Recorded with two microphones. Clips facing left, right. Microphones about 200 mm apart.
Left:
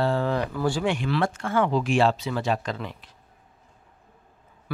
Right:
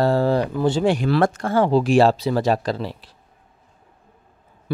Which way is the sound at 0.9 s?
40° right (ahead or behind).